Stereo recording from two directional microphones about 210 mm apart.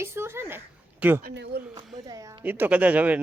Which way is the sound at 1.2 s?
45° right (ahead or behind).